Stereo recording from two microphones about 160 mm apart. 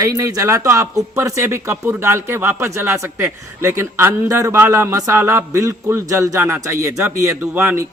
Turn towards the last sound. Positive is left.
turn(degrees=-15)  # may be behind; listen again after turning